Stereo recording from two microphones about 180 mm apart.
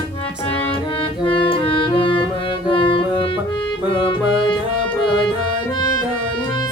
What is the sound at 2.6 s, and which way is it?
Music, 30° left (ahead or behind).